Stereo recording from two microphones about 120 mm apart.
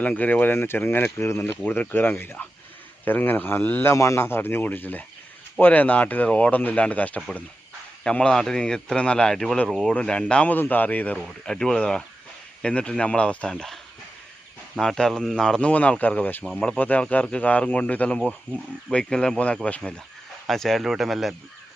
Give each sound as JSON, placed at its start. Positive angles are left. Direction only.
{"t": 0.0, "sound": "speech", "side_deg": 15}
{"t": 14.8, "sound": "speech", "side_deg": 5}